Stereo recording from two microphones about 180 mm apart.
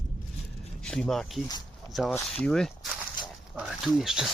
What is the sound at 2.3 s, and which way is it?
Speech, centre (ahead or behind).